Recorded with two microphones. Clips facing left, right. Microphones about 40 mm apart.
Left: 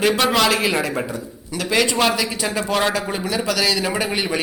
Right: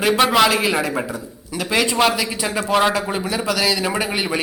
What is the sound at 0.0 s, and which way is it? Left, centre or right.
A man's voice, centre.